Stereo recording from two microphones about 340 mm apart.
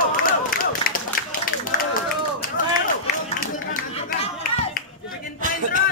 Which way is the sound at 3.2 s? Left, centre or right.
Left.